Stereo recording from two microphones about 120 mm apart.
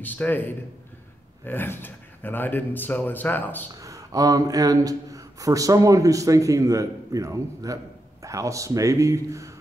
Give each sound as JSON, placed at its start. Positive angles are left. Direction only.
{"t": 0.0, "sound": "speech", "side_deg": 15}
{"t": 3.8, "sound": "speech", "side_deg": -30}